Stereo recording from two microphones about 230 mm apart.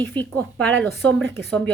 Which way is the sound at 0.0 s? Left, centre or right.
Centre.